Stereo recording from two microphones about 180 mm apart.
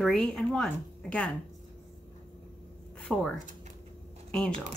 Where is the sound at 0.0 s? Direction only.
5° left (ahead or behind).